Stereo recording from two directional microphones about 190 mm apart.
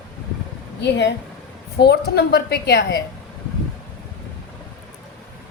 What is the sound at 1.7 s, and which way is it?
A woman's voice, 60° left (ahead or behind).